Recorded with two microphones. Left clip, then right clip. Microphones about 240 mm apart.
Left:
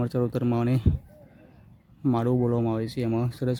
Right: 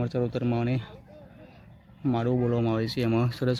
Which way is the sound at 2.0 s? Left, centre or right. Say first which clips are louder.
Left 2 dB; centre.